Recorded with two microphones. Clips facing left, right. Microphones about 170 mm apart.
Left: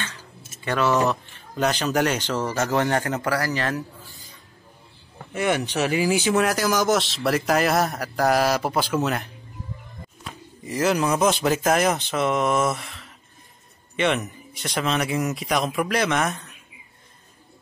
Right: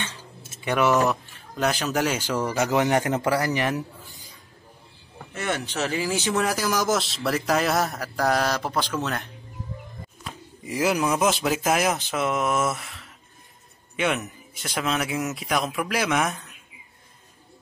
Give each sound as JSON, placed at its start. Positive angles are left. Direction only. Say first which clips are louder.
{"t": 0.7, "sound": "a man's voice", "louder": "even", "side_deg": -15}
{"t": 1.5, "sound": "a man's voice", "louder": "left 2 dB", "side_deg": 0}
{"t": 5.3, "sound": "speech", "louder": "left 5 dB", "side_deg": 15}
{"t": 10.6, "sound": "speech", "louder": "left 1 dB", "side_deg": -10}